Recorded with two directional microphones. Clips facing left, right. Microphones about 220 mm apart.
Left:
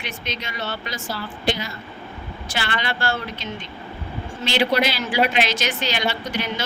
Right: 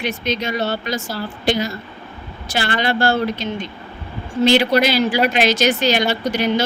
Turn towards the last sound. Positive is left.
turn(degrees=-40)  # may be behind; listen again after turning